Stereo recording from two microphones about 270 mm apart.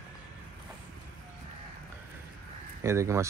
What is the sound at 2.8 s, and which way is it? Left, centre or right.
Speech, centre.